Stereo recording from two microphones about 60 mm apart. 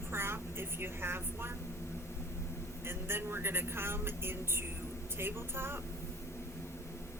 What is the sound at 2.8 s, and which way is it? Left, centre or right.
Speech, right.